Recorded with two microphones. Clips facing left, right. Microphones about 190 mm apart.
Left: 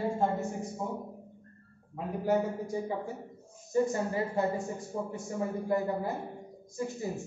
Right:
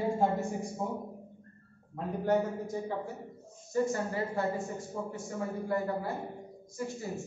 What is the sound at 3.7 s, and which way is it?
Speech, 20° left (ahead or behind).